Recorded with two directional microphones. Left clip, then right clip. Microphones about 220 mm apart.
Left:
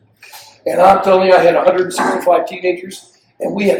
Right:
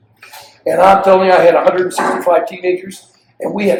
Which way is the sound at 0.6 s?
15° right (ahead or behind).